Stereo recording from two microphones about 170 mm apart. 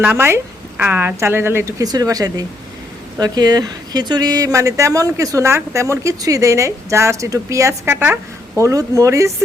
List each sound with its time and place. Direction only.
0.0 s speech: 15° right (ahead or behind)